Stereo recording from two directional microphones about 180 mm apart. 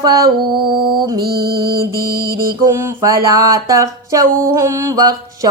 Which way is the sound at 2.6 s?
15° right (ahead or behind).